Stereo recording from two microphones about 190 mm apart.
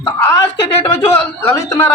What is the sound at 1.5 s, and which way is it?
Speech, 15° left (ahead or behind).